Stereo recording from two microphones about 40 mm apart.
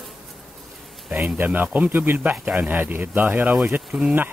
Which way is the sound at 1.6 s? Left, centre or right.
Right.